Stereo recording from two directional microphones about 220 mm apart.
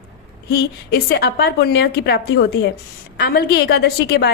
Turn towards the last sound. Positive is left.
turn(degrees=45)  # may be behind; listen again after turning